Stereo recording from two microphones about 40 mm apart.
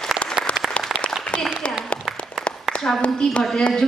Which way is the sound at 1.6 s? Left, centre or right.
Left.